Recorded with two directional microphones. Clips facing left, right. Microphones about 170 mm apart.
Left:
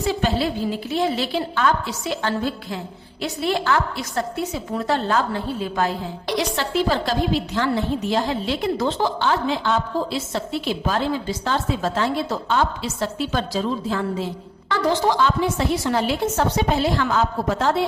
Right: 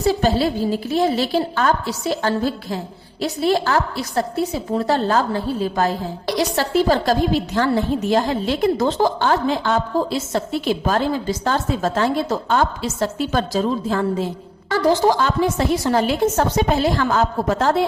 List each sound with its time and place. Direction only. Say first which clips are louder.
0.0 s a woman's voice: right 4 dB; 40° right (ahead or behind)